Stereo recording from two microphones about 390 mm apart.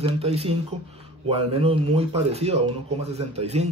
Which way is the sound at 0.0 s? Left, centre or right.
Centre.